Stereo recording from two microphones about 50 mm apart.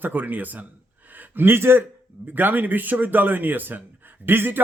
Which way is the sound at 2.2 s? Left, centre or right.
Right.